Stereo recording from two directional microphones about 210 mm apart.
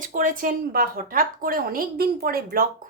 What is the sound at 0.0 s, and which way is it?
Speech, 40° right (ahead or behind).